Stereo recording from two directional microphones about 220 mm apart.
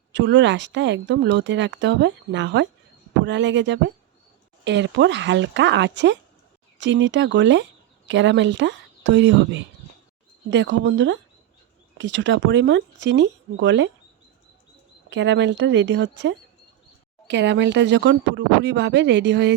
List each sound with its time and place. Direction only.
0.1 s speech: 55° right (ahead or behind)
15.1 s speech: 55° right (ahead or behind)